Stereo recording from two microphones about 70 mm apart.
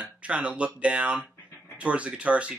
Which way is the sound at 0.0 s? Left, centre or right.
Centre.